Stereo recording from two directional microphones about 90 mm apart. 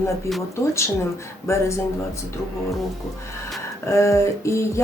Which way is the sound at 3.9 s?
35° left (ahead or behind).